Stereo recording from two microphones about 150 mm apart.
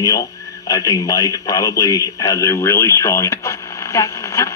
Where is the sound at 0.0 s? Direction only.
25° left (ahead or behind).